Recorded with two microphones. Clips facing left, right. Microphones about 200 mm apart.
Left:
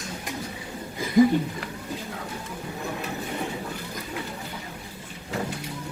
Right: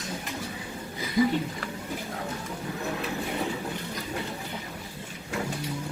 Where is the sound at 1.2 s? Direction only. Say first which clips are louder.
Left 6 dB; 50° left (ahead or behind).